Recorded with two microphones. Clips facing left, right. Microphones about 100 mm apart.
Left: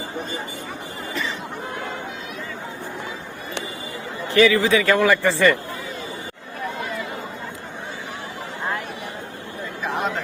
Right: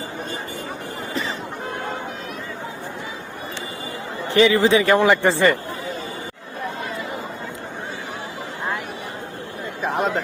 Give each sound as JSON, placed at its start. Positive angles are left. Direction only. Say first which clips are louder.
{"t": 4.3, "sound": "a man's voice", "louder": "right 1 dB", "side_deg": -25}